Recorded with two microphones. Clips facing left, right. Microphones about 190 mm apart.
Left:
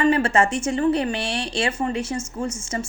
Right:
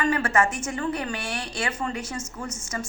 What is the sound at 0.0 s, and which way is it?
Speech, 25° left (ahead or behind).